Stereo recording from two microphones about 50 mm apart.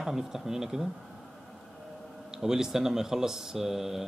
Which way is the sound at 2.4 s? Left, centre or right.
Centre.